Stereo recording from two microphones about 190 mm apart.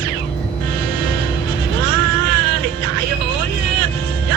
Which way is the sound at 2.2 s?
60° right (ahead or behind).